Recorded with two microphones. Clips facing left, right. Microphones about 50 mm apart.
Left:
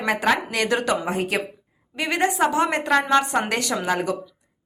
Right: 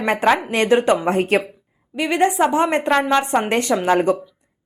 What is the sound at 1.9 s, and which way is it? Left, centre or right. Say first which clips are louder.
Speech: right 5 dB; centre.